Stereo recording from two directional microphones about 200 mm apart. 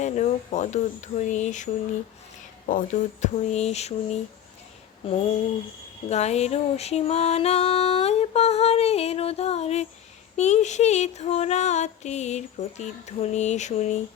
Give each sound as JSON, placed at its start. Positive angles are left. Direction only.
{"t": 0.0, "sound": "music", "side_deg": 35}
{"t": 6.1, "sound": "music", "side_deg": 35}